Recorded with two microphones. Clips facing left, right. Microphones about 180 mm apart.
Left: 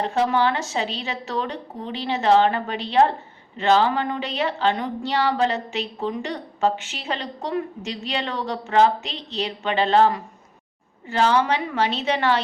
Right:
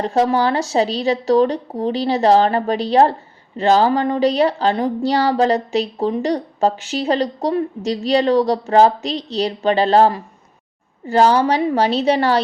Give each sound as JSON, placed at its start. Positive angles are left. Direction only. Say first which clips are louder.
{"t": 0.0, "sound": "speech", "louder": "right 4 dB", "side_deg": -35}